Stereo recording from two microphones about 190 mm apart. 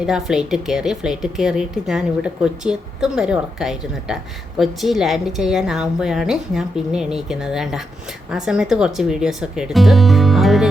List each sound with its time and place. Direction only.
0.0 s speech: 5° right (ahead or behind)